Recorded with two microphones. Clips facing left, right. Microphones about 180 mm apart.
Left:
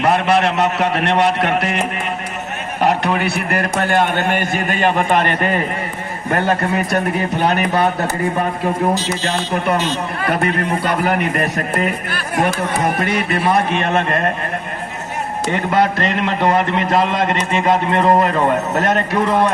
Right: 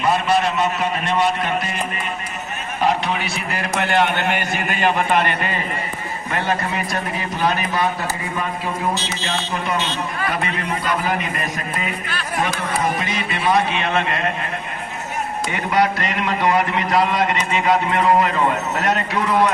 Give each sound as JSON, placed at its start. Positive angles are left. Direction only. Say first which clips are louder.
{"t": 0.0, "sound": "a man's voice", "louder": "left 3 dB", "side_deg": 65}
{"t": 2.8, "sound": "a man's voice", "louder": "left 4 dB", "side_deg": 60}
{"t": 4.1, "sound": "a man's voice", "louder": "left 4 dB", "side_deg": 45}
{"t": 15.4, "sound": "a man's voice", "louder": "left 3 dB", "side_deg": 50}